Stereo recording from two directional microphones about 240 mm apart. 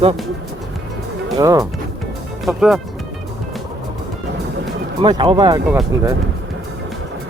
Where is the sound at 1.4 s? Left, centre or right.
Centre.